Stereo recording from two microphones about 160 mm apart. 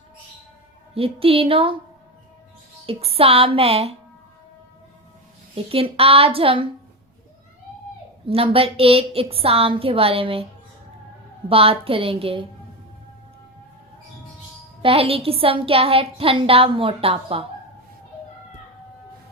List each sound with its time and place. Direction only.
0.9 s a woman's voice: 35° right (ahead or behind)
2.8 s a woman's voice: 35° right (ahead or behind)
5.7 s a woman's voice: 35° right (ahead or behind)
8.3 s a woman's voice: 35° right (ahead or behind)
11.4 s a woman's voice: 35° right (ahead or behind)
14.8 s a woman's voice: 35° right (ahead or behind)